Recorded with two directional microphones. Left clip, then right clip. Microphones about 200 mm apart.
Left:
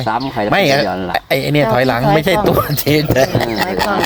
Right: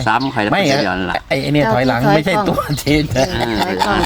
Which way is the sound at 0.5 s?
30° left (ahead or behind).